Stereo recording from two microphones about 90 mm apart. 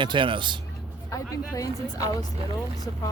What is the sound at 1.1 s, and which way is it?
Speech, 40° left (ahead or behind).